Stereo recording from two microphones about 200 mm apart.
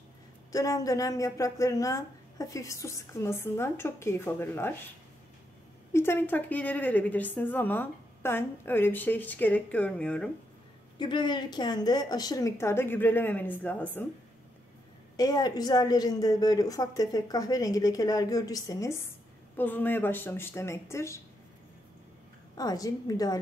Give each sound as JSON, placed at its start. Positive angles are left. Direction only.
{"t": 0.5, "sound": "a woman's voice", "side_deg": 15}
{"t": 5.9, "sound": "a woman's voice", "side_deg": 10}
{"t": 11.0, "sound": "a woman's voice", "side_deg": 25}
{"t": 15.1, "sound": "a woman's voice", "side_deg": 20}
{"t": 22.6, "sound": "a woman's voice", "side_deg": 20}